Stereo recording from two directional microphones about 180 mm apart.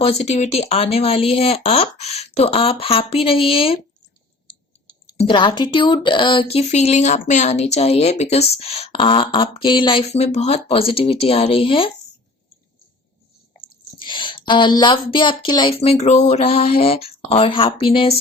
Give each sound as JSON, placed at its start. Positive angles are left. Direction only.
{"t": 0.0, "sound": "speech", "side_deg": 35}
{"t": 4.9, "sound": "speech", "side_deg": 25}
{"t": 14.0, "sound": "speech", "side_deg": 25}